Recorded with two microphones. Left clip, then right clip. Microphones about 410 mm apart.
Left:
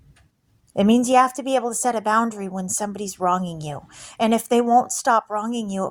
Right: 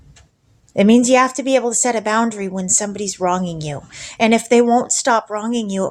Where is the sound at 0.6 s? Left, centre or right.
Left.